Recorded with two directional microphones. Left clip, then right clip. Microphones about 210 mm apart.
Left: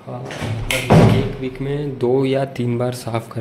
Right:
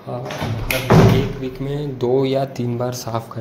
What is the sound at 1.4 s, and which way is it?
A man's voice, 10° left (ahead or behind).